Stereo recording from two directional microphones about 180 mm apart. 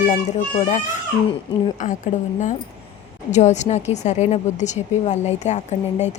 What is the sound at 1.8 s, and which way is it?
Speech, 45° left (ahead or behind).